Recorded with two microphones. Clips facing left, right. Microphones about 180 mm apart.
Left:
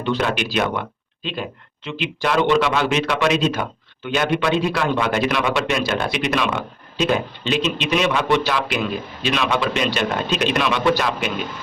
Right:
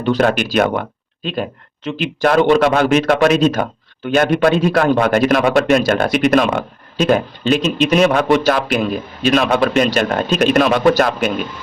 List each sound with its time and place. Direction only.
0.0 s speech: 45° right (ahead or behind)